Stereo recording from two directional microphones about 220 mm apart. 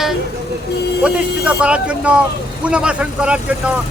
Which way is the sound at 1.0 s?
5° right (ahead or behind).